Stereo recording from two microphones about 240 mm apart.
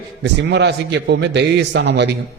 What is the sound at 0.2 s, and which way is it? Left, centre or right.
A man's voice, right.